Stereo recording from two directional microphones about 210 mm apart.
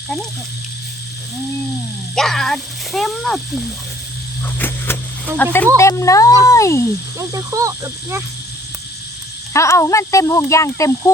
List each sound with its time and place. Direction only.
2.1 s speech: centre (ahead or behind)
4.4 s a sound: 10° left (ahead or behind)
5.4 s speech: 10° left (ahead or behind)
7.2 s speech: 15° right (ahead or behind)
9.5 s speech: 15° left (ahead or behind)